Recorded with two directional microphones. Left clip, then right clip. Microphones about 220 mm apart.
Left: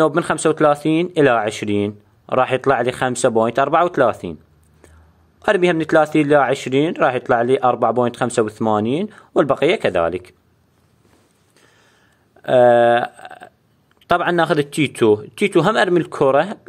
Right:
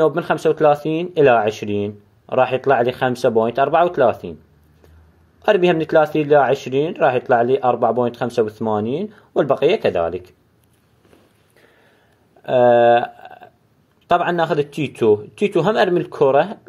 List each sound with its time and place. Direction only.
0.0 s speech: 35° left (ahead or behind)
5.4 s speech: 35° left (ahead or behind)
12.4 s speech: 35° left (ahead or behind)